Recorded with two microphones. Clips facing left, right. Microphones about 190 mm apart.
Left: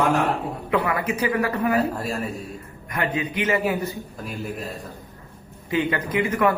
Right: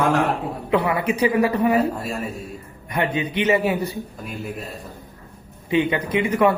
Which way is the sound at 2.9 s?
25° right (ahead or behind).